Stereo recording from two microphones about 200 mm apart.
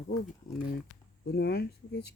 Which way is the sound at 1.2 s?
55° left (ahead or behind).